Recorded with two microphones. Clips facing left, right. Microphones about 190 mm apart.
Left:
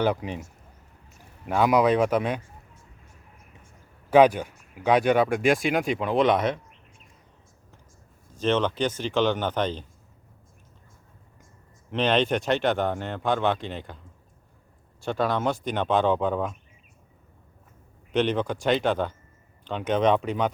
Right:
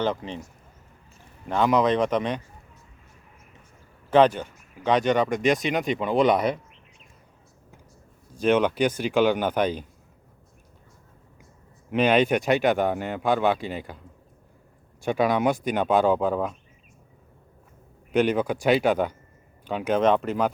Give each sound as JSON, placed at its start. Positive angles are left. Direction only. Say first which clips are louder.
{"t": 0.0, "sound": "speech", "louder": "left 2 dB", "side_deg": 10}
{"t": 1.5, "sound": "speech", "louder": "left 1 dB", "side_deg": 10}
{"t": 4.1, "sound": "speech", "louder": "left 1 dB", "side_deg": 10}
{"t": 8.4, "sound": "speech", "louder": "right 3 dB", "side_deg": -10}
{"t": 11.9, "sound": "speech", "louder": "right 3 dB", "side_deg": -10}
{"t": 15.0, "sound": "speech", "louder": "right 3 dB", "side_deg": -10}
{"t": 18.1, "sound": "speech", "louder": "right 2 dB", "side_deg": -10}